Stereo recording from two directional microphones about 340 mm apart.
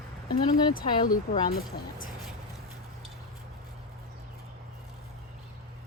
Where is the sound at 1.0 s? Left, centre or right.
Left.